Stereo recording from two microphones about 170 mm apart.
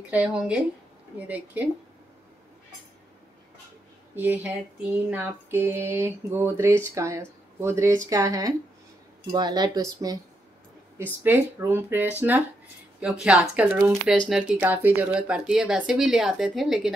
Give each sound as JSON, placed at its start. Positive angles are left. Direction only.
{"t": 0.1, "sound": "speech", "side_deg": -10}
{"t": 4.1, "sound": "speech", "side_deg": -10}
{"t": 11.2, "sound": "speech", "side_deg": -10}